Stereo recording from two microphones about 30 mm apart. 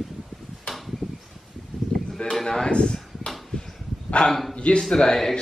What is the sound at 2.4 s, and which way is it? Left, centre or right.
Speech, left.